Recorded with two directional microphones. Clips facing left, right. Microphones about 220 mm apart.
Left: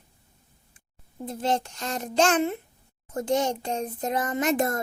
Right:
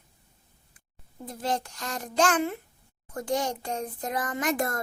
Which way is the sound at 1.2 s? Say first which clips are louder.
Left 4 dB; 25° left (ahead or behind).